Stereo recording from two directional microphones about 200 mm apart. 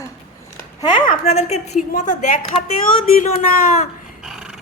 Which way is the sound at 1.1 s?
35° left (ahead or behind).